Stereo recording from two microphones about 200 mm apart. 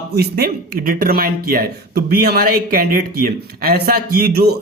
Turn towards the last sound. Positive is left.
turn(degrees=-55)  # may be behind; listen again after turning